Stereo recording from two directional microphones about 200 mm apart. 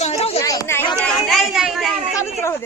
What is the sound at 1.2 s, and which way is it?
Speech, centre (ahead or behind).